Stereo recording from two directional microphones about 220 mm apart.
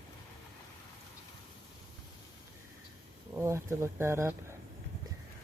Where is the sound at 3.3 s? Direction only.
10° right (ahead or behind).